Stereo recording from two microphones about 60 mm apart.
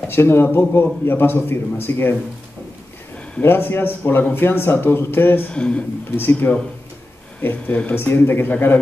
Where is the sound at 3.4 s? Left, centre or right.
Left.